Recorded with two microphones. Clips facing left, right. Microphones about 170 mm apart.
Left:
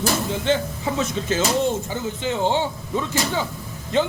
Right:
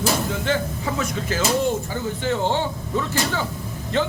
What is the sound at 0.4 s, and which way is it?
Speech, 25° left (ahead or behind).